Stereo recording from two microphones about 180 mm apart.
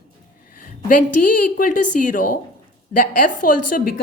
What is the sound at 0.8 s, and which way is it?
Speech, 50° left (ahead or behind).